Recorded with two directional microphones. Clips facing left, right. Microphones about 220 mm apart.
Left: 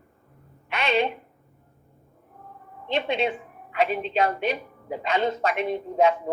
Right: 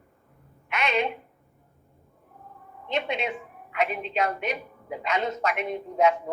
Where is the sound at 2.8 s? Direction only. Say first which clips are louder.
Left 4 dB; 30° left (ahead or behind).